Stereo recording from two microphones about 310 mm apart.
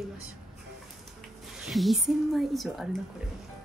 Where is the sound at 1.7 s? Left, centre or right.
Centre.